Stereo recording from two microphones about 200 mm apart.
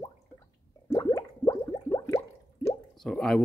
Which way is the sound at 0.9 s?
20° left (ahead or behind).